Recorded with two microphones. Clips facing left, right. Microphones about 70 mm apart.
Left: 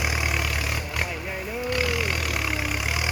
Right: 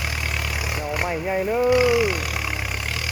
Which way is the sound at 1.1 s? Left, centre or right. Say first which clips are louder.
Right 9 dB; right.